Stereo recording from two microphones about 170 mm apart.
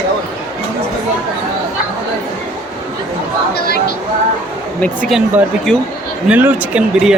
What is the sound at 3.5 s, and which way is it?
Speech, 70° left (ahead or behind).